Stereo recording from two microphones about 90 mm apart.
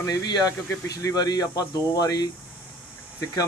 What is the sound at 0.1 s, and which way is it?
Speech, 45° left (ahead or behind).